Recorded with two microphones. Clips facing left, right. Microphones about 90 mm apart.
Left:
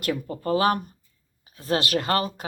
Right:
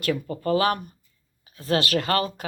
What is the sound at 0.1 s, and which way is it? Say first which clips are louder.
Speech: right 1 dB; 20° left (ahead or behind).